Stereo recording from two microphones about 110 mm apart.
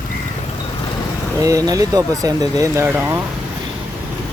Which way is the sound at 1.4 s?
30° right (ahead or behind).